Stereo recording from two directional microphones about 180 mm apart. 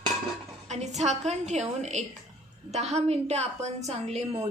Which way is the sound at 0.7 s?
40° right (ahead or behind).